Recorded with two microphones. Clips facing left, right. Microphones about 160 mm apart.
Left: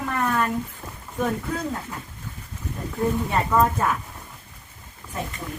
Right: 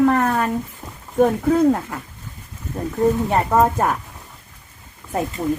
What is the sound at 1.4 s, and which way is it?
Speech, 55° right (ahead or behind).